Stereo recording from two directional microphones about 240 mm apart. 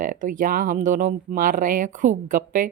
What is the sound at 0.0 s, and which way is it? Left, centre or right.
Speech, right.